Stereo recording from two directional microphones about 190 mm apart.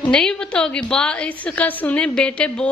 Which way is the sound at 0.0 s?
5° left (ahead or behind).